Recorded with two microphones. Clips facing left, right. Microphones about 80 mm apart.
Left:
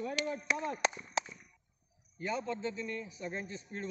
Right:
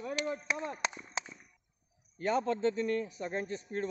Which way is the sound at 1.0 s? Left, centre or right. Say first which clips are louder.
Left 4 dB; right.